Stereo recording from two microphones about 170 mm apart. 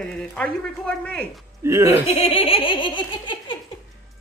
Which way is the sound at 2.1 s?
35° left (ahead or behind).